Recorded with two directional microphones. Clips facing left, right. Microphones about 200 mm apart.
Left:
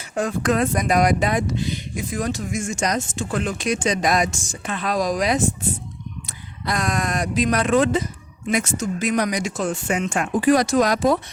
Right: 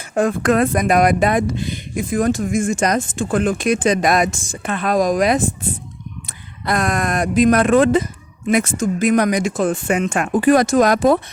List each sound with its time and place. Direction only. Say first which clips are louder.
0.1 s speech: right 5 dB; 55° right (ahead or behind)
6.7 s speech: right 4 dB; 55° right (ahead or behind)